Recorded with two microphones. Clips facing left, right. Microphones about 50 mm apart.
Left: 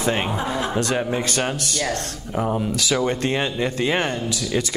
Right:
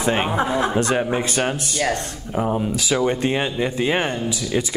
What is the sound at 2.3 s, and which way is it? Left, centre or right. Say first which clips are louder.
Speech: right 1 dB; centre.